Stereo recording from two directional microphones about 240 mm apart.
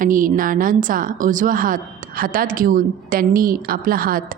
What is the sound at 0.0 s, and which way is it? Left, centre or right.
A woman's voice, right.